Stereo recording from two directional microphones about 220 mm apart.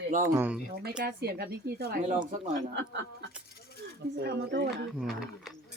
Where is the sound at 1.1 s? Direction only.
45° right (ahead or behind).